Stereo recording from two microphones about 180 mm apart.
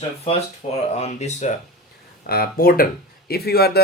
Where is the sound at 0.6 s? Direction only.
35° left (ahead or behind).